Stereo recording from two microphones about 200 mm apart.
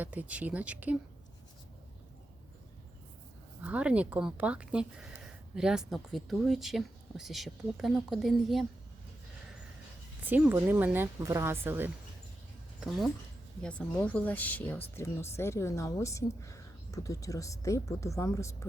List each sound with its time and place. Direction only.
0.0 s speech: 10° right (ahead or behind)
3.6 s speech: 5° right (ahead or behind)
10.2 s speech: 10° right (ahead or behind)
13.6 s a woman's voice: 5° left (ahead or behind)